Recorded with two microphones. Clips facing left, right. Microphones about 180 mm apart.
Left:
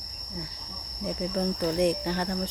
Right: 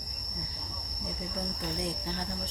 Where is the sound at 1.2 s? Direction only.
70° left (ahead or behind).